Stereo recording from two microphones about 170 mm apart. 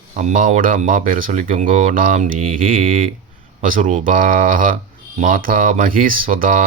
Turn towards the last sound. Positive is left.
turn(degrees=-55)  # may be behind; listen again after turning